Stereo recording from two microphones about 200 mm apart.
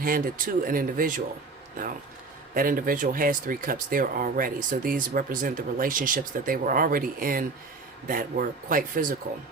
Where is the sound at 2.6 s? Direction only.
45° right (ahead or behind).